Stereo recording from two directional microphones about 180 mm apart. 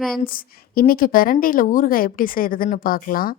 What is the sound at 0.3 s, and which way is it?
Speech, 55° left (ahead or behind).